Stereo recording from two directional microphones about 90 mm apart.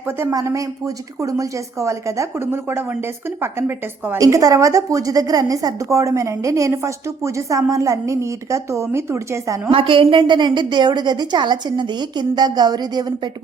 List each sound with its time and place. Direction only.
0.2 s a woman's voice: 35° right (ahead or behind)
4.2 s a woman's voice: 40° right (ahead or behind)
9.7 s a woman's voice: 85° right; by 13.1 s 50° right (ahead or behind)